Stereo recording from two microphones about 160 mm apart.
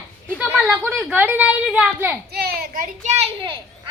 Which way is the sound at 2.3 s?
75° right (ahead or behind).